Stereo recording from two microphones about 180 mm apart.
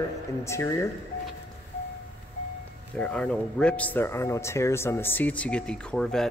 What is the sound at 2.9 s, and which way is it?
Speech, 5° left (ahead or behind).